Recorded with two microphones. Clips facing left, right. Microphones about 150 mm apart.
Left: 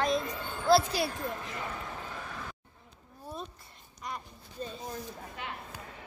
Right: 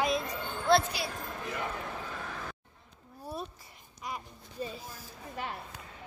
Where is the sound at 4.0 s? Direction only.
5° right (ahead or behind).